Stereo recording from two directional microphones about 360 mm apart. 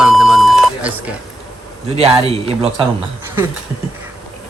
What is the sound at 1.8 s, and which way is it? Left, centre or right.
A man's voice, centre.